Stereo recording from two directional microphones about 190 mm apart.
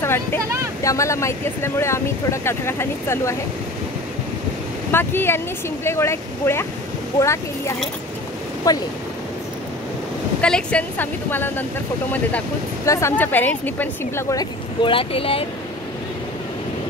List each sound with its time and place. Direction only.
0.0 s vehicle: 10° left (ahead or behind)
0.8 s speech: 15° left (ahead or behind)
4.9 s speech: 10° left (ahead or behind)
10.4 s speech: 5° left (ahead or behind); by 15.4 s 30° left (ahead or behind)